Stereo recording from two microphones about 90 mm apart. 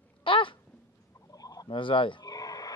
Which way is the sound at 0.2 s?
70° left (ahead or behind).